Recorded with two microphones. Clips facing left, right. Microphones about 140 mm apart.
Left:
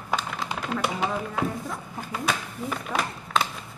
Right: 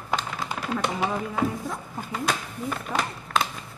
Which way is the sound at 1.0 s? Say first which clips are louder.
Right 1 dB; centre (ahead or behind).